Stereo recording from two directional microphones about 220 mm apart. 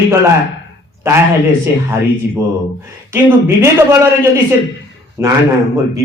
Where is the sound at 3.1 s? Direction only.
10° right (ahead or behind).